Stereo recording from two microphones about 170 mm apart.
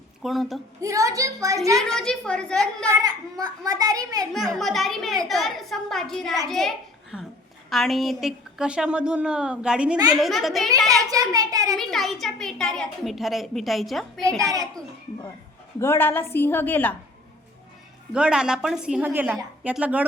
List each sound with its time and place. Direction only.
0.2 s a woman's voice: centre (ahead or behind)
0.8 s a child's voice: 20° right (ahead or behind)
1.8 s a woman's voice: 5° left (ahead or behind)
2.9 s a child's voice: 20° right (ahead or behind)
4.4 s a woman's voice: centre (ahead or behind)
10.8 s a child's voice: 20° right (ahead or behind)
11.8 s a woman's voice: centre (ahead or behind)
14.4 s a child's voice: 20° right (ahead or behind)
15.8 s a woman's voice: 15° left (ahead or behind)
18.1 s a woman's voice: 5° right (ahead or behind)